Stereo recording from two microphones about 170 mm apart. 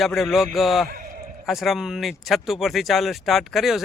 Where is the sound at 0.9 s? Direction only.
60° right (ahead or behind).